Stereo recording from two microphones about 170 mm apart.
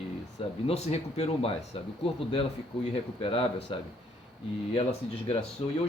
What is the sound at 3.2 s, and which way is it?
Speech, 35° left (ahead or behind).